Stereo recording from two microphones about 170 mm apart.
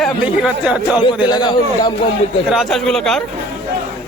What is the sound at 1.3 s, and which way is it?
Speech, 25° left (ahead or behind).